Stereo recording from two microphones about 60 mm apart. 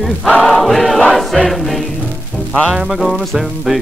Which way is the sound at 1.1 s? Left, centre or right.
Centre.